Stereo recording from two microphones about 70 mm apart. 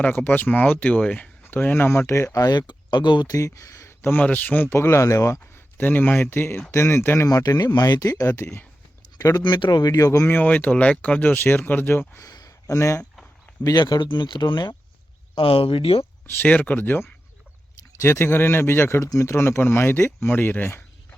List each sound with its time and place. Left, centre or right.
0.0 s speech: left
1.9 s a man's voice: left
2.4 s speech: left
3.3 s speech: left
4.0 s a man's voice: left
5.7 s a man's voice: left
7.3 s speech: left
10.2 s speech: left
12.2 s a sound: left
13.7 s speech: left
16.2 s speech: left
17.7 s a man's voice: left